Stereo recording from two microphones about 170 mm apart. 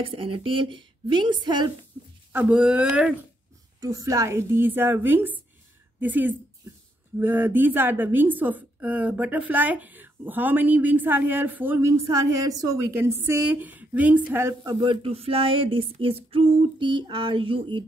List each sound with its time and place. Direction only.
0.0 s a woman's voice: 35° right (ahead or behind)
2.3 s a woman's voice: 5° right (ahead or behind)
3.8 s a woman's voice: 20° right (ahead or behind)